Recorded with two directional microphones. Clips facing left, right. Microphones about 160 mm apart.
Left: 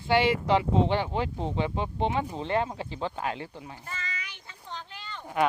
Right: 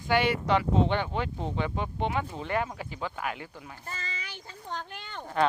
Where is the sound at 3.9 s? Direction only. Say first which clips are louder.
Even; 30° right (ahead or behind).